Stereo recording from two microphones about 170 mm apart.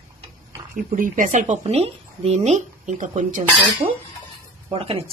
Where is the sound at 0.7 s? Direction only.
50° right (ahead or behind).